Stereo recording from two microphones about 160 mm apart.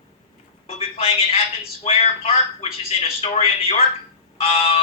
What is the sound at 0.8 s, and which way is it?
Speech, 40° left (ahead or behind).